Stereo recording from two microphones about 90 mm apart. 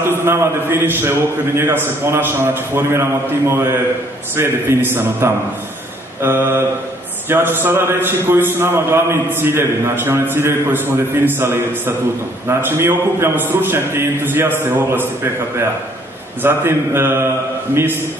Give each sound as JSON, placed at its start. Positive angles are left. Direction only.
{"t": 0.2, "sound": "a man's voice", "side_deg": -30}
{"t": 16.4, "sound": "a man's voice", "side_deg": -25}